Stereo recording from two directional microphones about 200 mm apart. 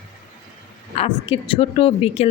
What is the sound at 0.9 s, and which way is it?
Speech, 30° left (ahead or behind).